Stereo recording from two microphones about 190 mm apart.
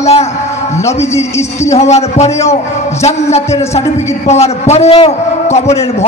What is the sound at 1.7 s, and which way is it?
A man's voice, 35° left (ahead or behind).